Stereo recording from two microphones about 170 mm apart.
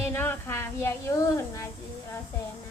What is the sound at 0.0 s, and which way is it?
Speech, 15° left (ahead or behind).